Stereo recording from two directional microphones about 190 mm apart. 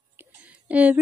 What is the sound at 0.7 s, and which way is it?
Speech, 10° right (ahead or behind).